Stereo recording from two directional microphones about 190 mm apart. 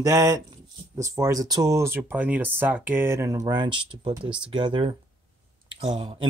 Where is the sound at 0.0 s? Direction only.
15° right (ahead or behind).